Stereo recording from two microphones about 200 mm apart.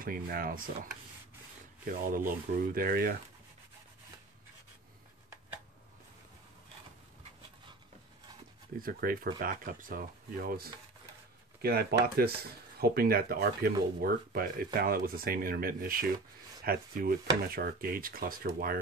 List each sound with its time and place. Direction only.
0.0 s speech: 45° right (ahead or behind)
1.9 s speech: 45° right (ahead or behind)
8.7 s speech: 45° right (ahead or behind)